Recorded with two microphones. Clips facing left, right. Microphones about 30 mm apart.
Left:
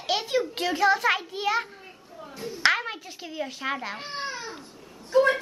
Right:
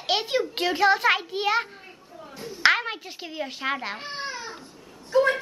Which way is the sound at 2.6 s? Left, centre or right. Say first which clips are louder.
Right 3 dB; right.